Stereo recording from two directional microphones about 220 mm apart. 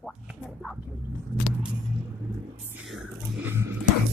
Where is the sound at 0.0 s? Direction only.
Centre (ahead or behind).